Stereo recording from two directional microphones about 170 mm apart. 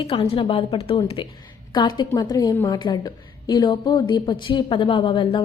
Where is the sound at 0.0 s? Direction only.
30° left (ahead or behind).